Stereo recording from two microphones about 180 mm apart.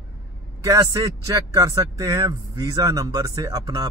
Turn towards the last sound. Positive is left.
turn(degrees=-20)  # may be behind; listen again after turning